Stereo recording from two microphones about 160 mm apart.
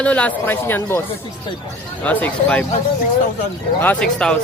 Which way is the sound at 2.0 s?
10° left (ahead or behind).